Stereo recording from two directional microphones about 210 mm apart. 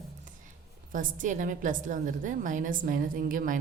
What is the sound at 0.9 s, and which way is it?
A woman's voice, 40° right (ahead or behind).